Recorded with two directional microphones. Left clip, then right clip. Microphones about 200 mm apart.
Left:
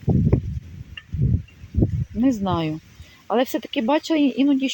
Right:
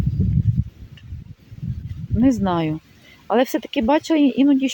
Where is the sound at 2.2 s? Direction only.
15° right (ahead or behind).